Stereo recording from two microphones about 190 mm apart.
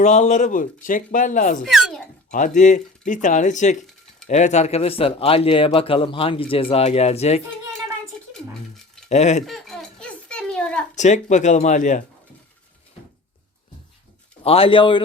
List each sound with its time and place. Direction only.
0.0 s speech: 40° left (ahead or behind)
1.6 s speech: centre (ahead or behind)
2.3 s speech: 40° left (ahead or behind)
8.1 s a sound: 5° left (ahead or behind)
9.0 s speech: 35° left (ahead or behind)
9.5 s a sound: centre (ahead or behind)
10.9 s speech: 40° left (ahead or behind)
14.4 s a man's voice: 30° left (ahead or behind)